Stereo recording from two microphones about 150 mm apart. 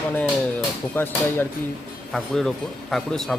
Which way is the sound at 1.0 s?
15° left (ahead or behind).